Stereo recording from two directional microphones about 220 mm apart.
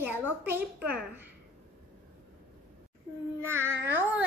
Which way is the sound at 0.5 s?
5° right (ahead or behind).